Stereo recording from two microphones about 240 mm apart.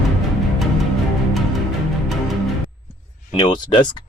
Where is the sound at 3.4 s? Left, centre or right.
Centre.